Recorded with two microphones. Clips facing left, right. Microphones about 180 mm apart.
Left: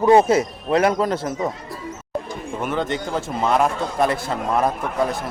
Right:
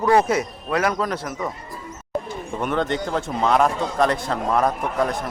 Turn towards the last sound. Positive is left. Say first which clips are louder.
# even
turn(degrees=5)  # may be behind; listen again after turning